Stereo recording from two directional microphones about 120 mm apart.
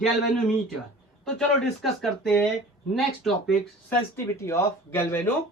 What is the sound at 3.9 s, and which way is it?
Speech, 20° left (ahead or behind).